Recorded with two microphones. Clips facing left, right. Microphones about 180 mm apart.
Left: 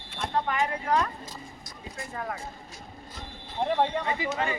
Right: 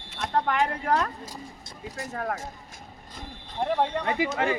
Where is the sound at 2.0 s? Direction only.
45° right (ahead or behind).